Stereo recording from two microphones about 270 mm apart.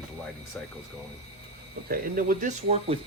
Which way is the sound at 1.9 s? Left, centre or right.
Right.